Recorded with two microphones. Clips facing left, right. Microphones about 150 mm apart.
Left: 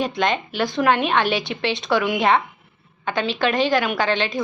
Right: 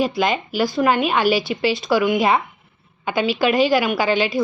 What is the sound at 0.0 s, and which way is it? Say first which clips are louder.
A woman's voice: right 2 dB; 5° right (ahead or behind).